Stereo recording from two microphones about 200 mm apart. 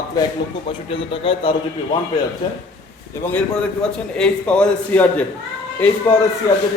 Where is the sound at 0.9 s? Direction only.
25° left (ahead or behind).